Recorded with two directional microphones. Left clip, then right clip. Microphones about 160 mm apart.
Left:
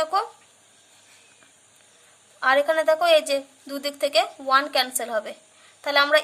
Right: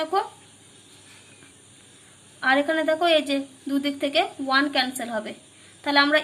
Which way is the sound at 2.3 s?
50° left (ahead or behind).